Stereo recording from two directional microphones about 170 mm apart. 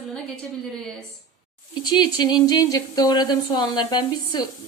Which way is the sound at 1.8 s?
25° left (ahead or behind).